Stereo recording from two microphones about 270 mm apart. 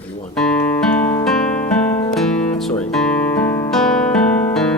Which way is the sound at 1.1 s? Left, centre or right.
Centre.